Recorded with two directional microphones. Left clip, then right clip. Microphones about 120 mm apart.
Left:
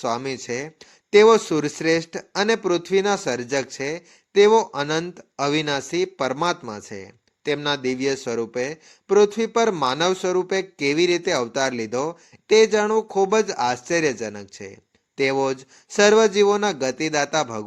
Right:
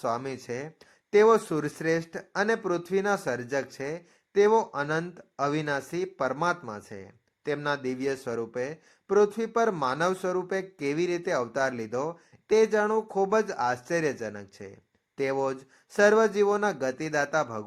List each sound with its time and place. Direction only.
0.0 s speech: 20° left (ahead or behind)